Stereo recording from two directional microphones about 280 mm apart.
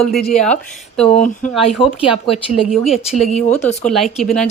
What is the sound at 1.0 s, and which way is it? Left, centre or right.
Speech, left.